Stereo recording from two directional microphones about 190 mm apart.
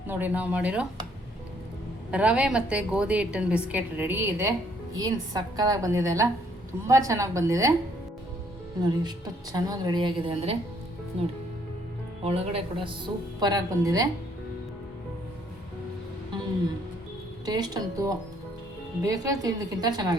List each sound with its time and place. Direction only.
0.1 s a woman's voice: 10° right (ahead or behind)
2.0 s a woman's voice: 5° right (ahead or behind)
8.8 s speech: 20° right (ahead or behind)
12.2 s speech: 30° right (ahead or behind)
13.4 s speech: 20° right (ahead or behind)
17.4 s speech: 20° right (ahead or behind)